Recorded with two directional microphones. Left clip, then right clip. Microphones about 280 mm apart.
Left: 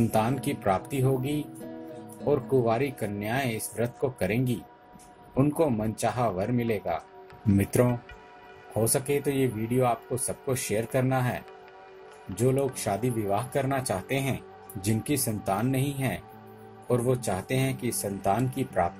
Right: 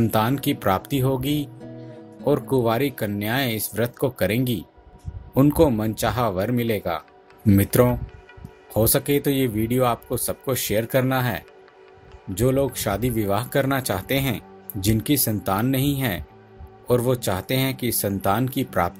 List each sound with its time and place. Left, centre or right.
0.1 s speech: right